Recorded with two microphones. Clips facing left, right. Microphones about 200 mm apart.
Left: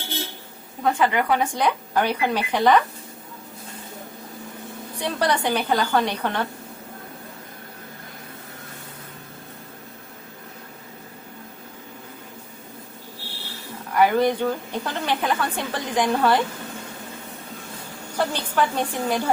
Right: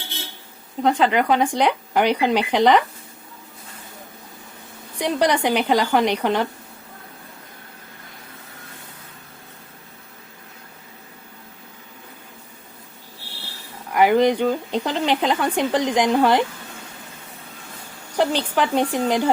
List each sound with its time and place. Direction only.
0.8 s speech: 25° right (ahead or behind)
4.9 s speech: 15° right (ahead or behind)
13.9 s speech: 15° right (ahead or behind)
18.2 s speech: 20° right (ahead or behind)